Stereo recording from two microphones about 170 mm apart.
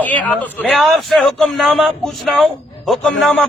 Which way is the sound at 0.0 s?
10° left (ahead or behind).